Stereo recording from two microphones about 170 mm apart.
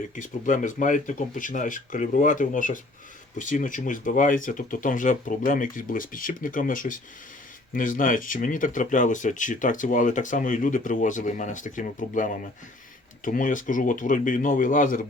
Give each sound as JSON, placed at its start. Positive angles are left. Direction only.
{"t": 0.2, "sound": "speech", "side_deg": 50}